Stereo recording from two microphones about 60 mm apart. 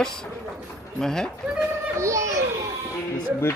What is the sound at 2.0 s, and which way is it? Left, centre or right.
Speech, right.